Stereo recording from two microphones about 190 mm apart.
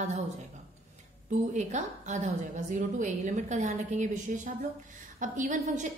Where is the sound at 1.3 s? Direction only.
40° right (ahead or behind).